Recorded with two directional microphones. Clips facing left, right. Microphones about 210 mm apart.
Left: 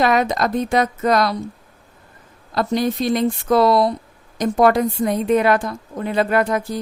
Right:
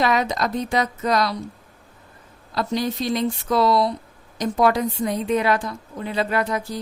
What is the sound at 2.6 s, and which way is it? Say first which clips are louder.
A woman's voice: left 4 dB; 55° left (ahead or behind).